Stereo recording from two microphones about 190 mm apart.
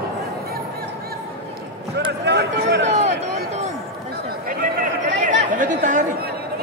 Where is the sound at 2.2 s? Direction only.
60° right (ahead or behind).